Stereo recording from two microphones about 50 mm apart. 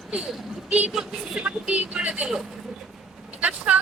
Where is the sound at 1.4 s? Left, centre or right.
Right.